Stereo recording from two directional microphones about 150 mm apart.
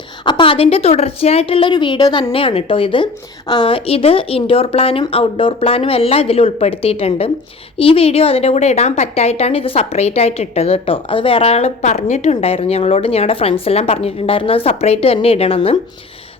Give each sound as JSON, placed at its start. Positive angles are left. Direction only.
{"t": 0.3, "sound": "a woman's voice", "side_deg": 35}